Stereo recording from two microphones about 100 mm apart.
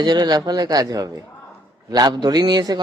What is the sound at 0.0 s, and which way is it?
A man's voice, 45° right (ahead or behind).